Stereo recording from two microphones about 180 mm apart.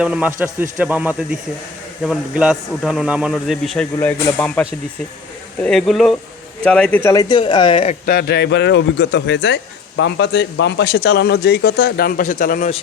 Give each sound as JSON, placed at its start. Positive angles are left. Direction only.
{"t": 0.0, "sound": "a man's voice", "side_deg": -5}
{"t": 5.6, "sound": "a man's voice", "side_deg": 0}
{"t": 8.0, "sound": "a man's voice", "side_deg": 60}